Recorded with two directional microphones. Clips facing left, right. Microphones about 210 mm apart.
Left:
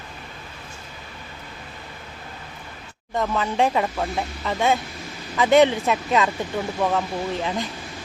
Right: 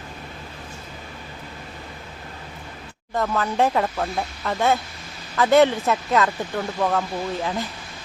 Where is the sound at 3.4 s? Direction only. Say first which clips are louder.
Even; 15° left (ahead or behind).